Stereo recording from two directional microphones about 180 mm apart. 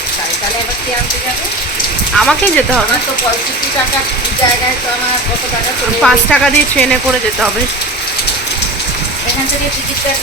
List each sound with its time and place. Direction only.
2.1 s speech: centre (ahead or behind)
6.0 s speech: 5° left (ahead or behind)